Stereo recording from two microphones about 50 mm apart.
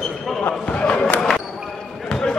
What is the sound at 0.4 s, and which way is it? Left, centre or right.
Speech, left.